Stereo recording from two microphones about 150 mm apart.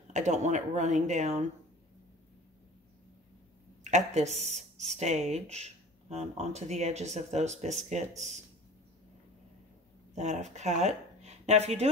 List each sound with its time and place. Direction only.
0.1 s speech: 50° right (ahead or behind)
3.8 s speech: 50° right (ahead or behind)
10.1 s speech: 50° right (ahead or behind)